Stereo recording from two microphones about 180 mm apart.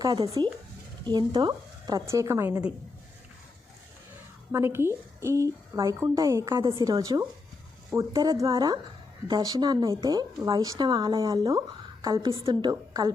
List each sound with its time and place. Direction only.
0.0 s speech: 20° right (ahead or behind)
4.5 s a woman's voice: 15° right (ahead or behind)